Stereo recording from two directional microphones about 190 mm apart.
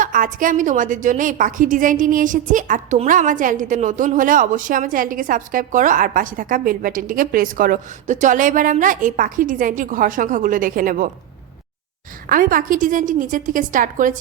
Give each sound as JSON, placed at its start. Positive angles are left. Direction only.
{"t": 0.0, "sound": "a woman's voice", "side_deg": -45}
{"t": 12.3, "sound": "a woman's voice", "side_deg": -45}